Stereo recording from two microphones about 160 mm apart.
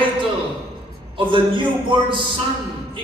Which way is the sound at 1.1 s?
30° right (ahead or behind).